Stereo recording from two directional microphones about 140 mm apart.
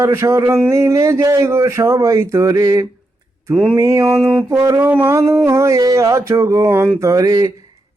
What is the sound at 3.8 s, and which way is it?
Speech, 20° right (ahead or behind).